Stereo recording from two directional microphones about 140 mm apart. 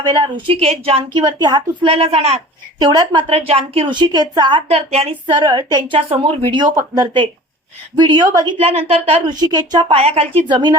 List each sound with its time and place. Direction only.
0.1 s a woman's voice: 35° right (ahead or behind)
1.9 s a woman's voice: 45° right (ahead or behind)
2.8 s a woman's voice: 30° right (ahead or behind)
3.2 s a woman's voice: 45° right (ahead or behind); by 6.0 s 30° right (ahead or behind)
6.1 s a woman's voice: 45° right (ahead or behind); by 8.5 s 25° right (ahead or behind)
8.5 s a woman's voice: 45° right (ahead or behind)
9.3 s a woman's voice: 30° right (ahead or behind)
9.9 s a woman's voice: 45° right (ahead or behind)